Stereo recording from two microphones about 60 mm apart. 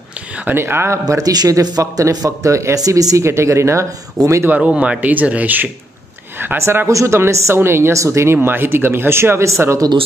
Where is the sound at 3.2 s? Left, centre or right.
Right.